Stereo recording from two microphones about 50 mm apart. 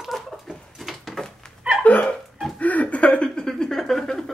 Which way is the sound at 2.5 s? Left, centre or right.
Left.